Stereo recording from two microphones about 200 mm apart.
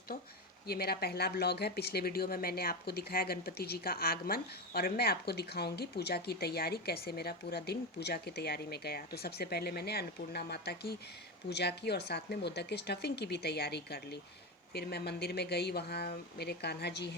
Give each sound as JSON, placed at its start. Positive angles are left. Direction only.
{"t": 0.7, "sound": "speech", "side_deg": 50}